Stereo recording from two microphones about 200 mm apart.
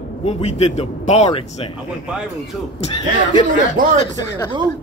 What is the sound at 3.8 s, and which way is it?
Speech, 45° right (ahead or behind).